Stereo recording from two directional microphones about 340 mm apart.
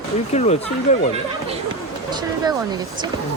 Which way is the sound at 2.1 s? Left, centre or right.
Centre.